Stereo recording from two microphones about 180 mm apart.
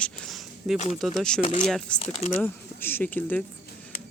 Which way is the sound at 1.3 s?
30° left (ahead or behind).